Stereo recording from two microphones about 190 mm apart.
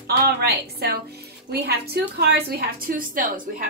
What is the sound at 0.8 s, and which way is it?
A woman's voice, 55° right (ahead or behind).